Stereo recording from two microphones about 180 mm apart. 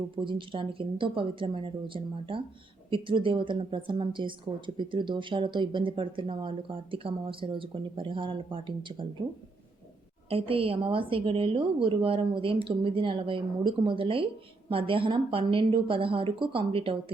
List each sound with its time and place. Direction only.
0.2 s a woman's voice: 25° right (ahead or behind)
10.2 s a woman's voice: 30° right (ahead or behind)